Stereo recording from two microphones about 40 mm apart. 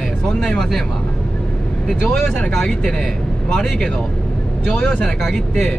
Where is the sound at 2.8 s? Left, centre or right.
Centre.